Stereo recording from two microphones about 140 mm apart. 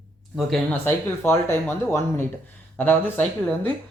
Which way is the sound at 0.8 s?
15° left (ahead or behind).